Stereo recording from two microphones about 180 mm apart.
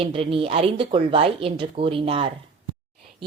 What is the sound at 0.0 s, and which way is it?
Speech, 30° right (ahead or behind).